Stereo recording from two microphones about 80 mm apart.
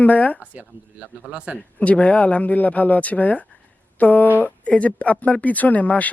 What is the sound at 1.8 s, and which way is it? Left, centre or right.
Speech, centre.